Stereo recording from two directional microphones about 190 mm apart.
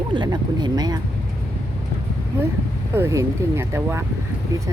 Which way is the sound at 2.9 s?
15° right (ahead or behind).